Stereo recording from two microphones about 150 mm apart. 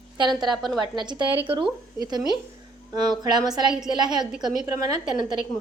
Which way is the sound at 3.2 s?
25° right (ahead or behind).